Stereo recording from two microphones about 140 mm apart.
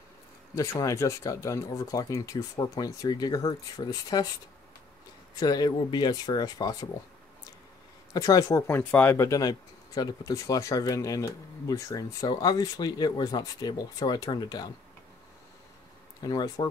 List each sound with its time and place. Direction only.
0.6 s speech: 25° left (ahead or behind)
5.3 s speech: 25° left (ahead or behind)
8.1 s speech: 25° left (ahead or behind)
16.2 s speech: 30° left (ahead or behind)